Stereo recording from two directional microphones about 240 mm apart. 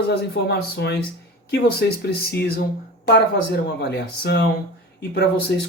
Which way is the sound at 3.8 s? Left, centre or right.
Left.